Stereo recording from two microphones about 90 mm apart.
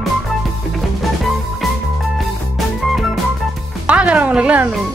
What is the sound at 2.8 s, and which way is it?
Music, centre (ahead or behind).